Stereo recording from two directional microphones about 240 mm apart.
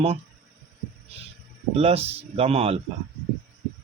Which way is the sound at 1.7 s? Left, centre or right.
Right.